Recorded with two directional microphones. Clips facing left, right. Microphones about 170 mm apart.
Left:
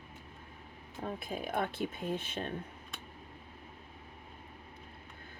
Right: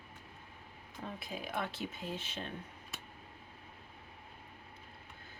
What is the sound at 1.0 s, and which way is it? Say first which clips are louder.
Speech: left 5 dB; 50° left (ahead or behind).